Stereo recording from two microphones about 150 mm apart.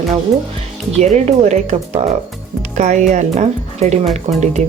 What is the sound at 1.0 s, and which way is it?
Speech, 50° right (ahead or behind).